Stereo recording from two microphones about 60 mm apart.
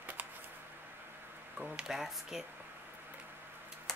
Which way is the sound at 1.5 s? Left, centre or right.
Centre.